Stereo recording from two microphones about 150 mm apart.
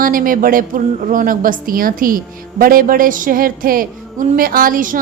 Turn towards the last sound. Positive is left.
turn(degrees=-65)  # may be behind; listen again after turning